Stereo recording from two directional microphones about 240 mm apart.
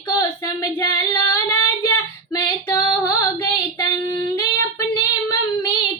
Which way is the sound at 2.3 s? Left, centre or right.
Centre.